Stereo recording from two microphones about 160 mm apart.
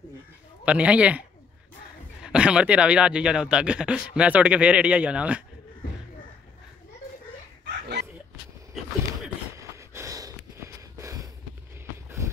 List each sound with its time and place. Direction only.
0.7 s speech: 5° right (ahead or behind)
2.2 s speech: 5° right (ahead or behind)
9.6 s a sound: 20° right (ahead or behind)